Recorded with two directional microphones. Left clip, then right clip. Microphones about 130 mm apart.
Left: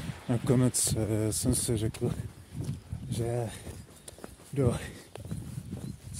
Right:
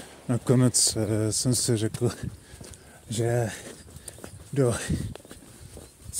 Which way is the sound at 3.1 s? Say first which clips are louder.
Right 7 dB; 50° right (ahead or behind).